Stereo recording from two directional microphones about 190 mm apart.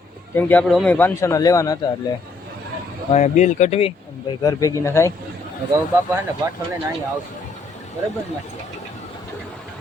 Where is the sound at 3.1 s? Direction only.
40° left (ahead or behind).